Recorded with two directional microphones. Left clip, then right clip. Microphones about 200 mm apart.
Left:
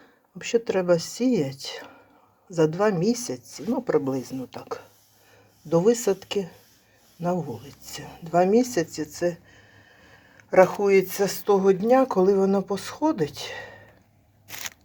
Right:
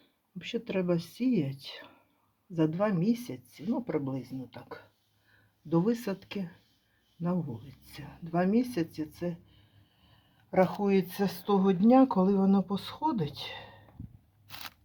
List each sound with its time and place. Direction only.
0.3 s speech: 10° left (ahead or behind)
7.9 s speech: 10° left (ahead or behind)
10.5 s speech: 20° left (ahead or behind)